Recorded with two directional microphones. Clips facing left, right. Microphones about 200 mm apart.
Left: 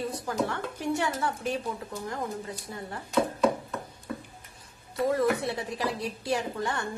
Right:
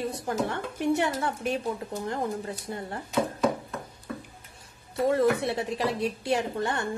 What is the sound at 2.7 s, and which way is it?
Speech, 30° right (ahead or behind).